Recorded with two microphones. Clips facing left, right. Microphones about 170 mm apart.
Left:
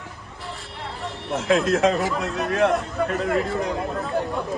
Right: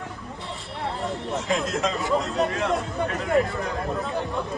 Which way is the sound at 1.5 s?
65° left (ahead or behind).